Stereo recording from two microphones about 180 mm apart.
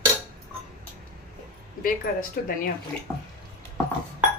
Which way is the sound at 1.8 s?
50° left (ahead or behind).